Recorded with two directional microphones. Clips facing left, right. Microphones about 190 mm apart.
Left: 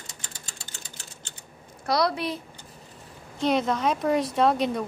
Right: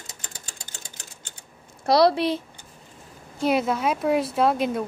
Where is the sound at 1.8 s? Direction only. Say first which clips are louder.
Right 6 dB; 30° right (ahead or behind).